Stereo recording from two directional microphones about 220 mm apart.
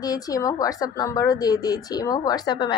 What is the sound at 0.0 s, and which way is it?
A woman's voice, 15° left (ahead or behind).